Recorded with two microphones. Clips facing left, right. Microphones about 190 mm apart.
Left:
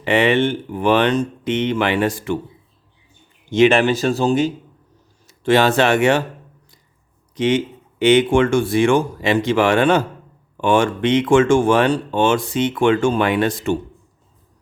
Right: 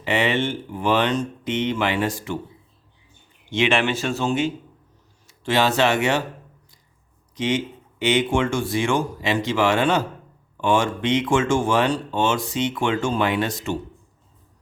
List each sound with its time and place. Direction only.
0.0 s speech: 60° left (ahead or behind)
3.5 s a man's voice: 40° left (ahead or behind)
5.3 s speech: 50° left (ahead or behind)
7.3 s speech: 55° left (ahead or behind)